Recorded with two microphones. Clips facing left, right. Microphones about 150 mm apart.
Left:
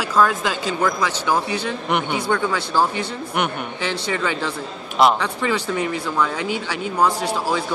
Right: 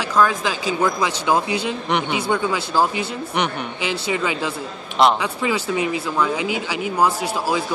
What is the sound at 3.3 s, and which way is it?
Speech, 5° left (ahead or behind).